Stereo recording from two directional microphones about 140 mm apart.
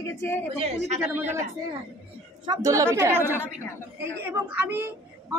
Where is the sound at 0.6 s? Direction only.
55° right (ahead or behind).